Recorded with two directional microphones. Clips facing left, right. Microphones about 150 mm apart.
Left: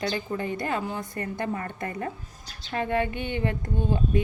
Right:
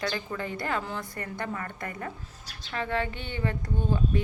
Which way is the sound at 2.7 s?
50° left (ahead or behind).